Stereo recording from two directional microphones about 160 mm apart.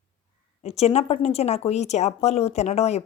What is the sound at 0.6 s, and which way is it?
Speech, 40° left (ahead or behind).